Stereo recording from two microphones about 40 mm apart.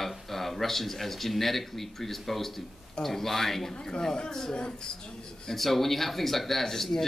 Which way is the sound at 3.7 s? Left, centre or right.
Centre.